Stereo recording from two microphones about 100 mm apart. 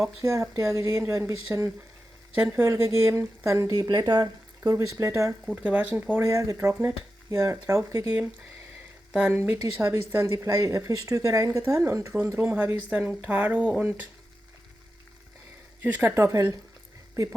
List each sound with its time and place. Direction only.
0.2 s speech: 30° right (ahead or behind)
5.6 s speech: 15° right (ahead or behind)
6.1 s speech: 30° right (ahead or behind)
9.3 s speech: 25° right (ahead or behind)
15.8 s speech: 20° right (ahead or behind)